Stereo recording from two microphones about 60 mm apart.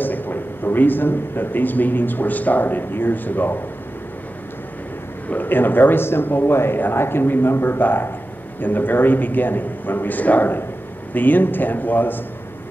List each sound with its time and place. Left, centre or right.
0.0 s speech: left
5.3 s speech: left